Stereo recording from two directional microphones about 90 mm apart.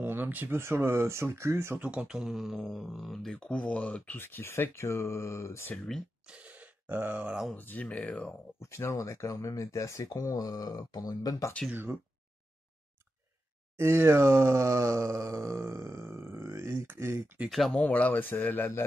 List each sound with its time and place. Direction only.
0.0 s speech: 20° right (ahead or behind)
1.8 s speech: 10° right (ahead or behind); by 5.7 s 30° left (ahead or behind)
6.2 s a sound: 15° right (ahead or behind)
7.5 s speech: 20° left (ahead or behind)
8.5 s speech: 30° left (ahead or behind)
11.7 s speech: 25° right (ahead or behind)
13.7 s speech: 30° right (ahead or behind)
17.5 s speech: centre (ahead or behind)
17.7 s speech: 15° left (ahead or behind)